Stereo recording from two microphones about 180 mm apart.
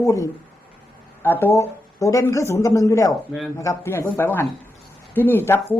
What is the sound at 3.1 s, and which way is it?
Speech, centre (ahead or behind).